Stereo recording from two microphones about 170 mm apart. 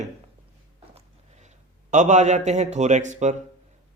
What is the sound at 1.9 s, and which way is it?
A man's voice, 45° right (ahead or behind).